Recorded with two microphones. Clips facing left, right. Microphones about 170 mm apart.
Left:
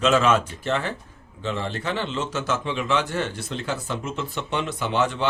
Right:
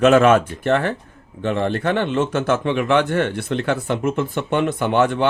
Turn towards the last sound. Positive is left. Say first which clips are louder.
# right 6 dB
turn(degrees=-55)  # may be behind; listen again after turning